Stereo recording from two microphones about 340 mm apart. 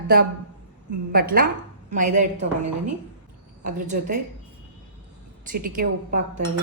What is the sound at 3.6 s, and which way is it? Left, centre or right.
Speech, right.